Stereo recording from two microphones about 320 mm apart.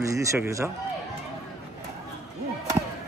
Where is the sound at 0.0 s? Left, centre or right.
Centre.